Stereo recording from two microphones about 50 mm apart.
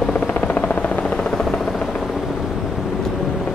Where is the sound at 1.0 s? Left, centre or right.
Centre.